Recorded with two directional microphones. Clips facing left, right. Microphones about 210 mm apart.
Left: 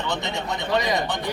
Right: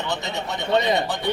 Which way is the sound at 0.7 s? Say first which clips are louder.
Right 3 dB; 25° right (ahead or behind).